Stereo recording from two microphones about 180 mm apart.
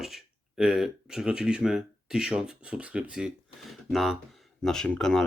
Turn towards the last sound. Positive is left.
turn(degrees=5)  # may be behind; listen again after turning